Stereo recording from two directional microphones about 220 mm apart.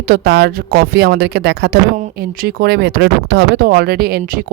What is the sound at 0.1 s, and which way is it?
Speech, 45° right (ahead or behind).